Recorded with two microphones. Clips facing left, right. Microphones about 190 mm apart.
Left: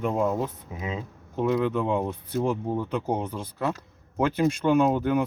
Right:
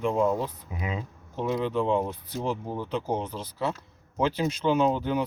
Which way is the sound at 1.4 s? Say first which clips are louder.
Left 2 dB; 55° left (ahead or behind).